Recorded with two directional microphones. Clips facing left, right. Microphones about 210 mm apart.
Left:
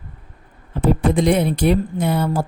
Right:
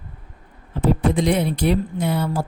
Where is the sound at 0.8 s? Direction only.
50° left (ahead or behind).